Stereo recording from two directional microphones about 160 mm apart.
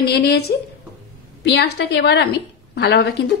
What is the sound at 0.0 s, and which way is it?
A woman's voice, 90° left.